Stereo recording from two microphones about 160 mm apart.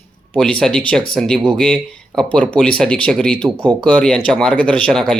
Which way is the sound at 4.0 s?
5° left (ahead or behind).